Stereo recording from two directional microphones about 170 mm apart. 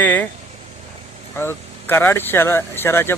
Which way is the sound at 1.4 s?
15° left (ahead or behind).